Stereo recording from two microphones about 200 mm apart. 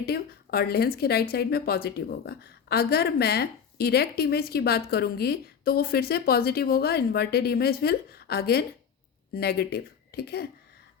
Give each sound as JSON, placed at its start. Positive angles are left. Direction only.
{"t": 0.0, "sound": "a woman's voice", "side_deg": 50}